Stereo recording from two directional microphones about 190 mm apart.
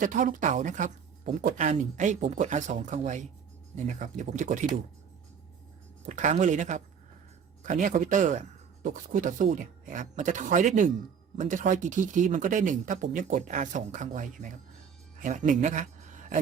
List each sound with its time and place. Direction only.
0.0 s speech: 45° right (ahead or behind)
6.1 s a man's voice: 40° right (ahead or behind)